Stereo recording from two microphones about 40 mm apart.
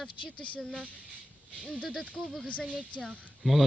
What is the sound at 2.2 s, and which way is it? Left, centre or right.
Speech, centre.